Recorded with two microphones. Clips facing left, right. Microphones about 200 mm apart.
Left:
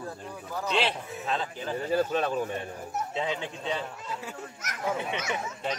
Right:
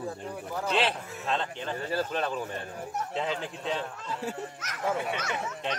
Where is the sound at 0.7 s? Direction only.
Centre (ahead or behind).